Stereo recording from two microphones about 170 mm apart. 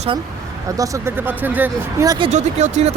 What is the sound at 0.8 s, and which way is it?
Speech, 15° right (ahead or behind).